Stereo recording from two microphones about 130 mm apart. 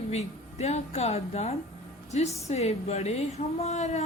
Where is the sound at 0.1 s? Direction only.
55° left (ahead or behind).